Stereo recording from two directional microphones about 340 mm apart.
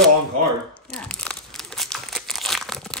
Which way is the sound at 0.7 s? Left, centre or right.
Centre.